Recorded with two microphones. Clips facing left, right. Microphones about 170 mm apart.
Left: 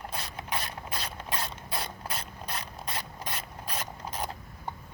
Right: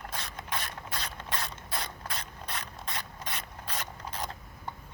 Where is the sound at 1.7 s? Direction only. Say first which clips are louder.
Left 3 dB; 10° left (ahead or behind).